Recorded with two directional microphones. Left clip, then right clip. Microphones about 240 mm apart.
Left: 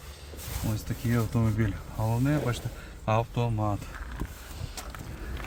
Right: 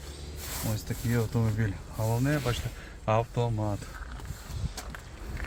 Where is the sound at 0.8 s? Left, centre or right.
Centre.